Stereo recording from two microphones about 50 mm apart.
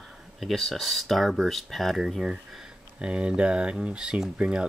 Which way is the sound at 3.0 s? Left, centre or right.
Centre.